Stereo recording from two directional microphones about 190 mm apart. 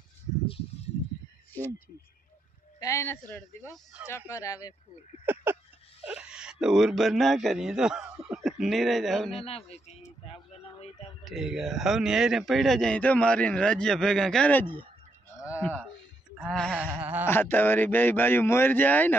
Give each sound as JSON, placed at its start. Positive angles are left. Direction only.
{"t": 2.8, "sound": "a man's voice", "side_deg": 15}
{"t": 5.2, "sound": "a sound", "side_deg": -10}
{"t": 6.0, "sound": "speech", "side_deg": -5}
{"t": 9.4, "sound": "speech", "side_deg": 30}
{"t": 10.3, "sound": "a sound", "side_deg": 30}
{"t": 11.2, "sound": "a man's voice", "side_deg": 0}
{"t": 15.4, "sound": "a sound", "side_deg": 10}
{"t": 17.0, "sound": "speech", "side_deg": -10}
{"t": 17.3, "sound": "a man's voice", "side_deg": 10}